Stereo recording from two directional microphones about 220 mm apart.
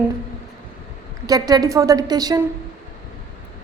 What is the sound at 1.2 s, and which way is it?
A woman's voice, 15° right (ahead or behind).